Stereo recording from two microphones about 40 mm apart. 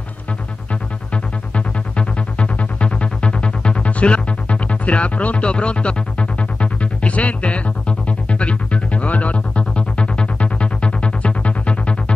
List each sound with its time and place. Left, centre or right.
2.0 s music: left